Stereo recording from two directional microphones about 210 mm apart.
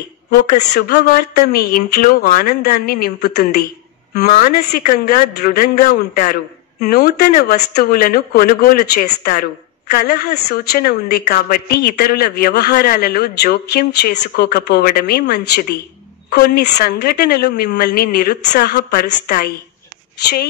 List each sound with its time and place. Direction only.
0.3 s speech: 45° left (ahead or behind)